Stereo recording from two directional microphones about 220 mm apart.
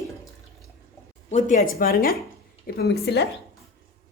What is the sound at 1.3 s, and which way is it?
A woman's voice, 40° left (ahead or behind).